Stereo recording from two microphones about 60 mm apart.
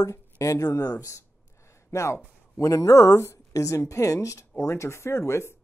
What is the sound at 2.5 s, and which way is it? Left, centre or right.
A woman's voice, left.